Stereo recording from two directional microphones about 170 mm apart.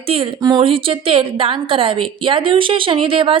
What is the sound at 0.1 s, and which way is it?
A woman's voice, 25° right (ahead or behind).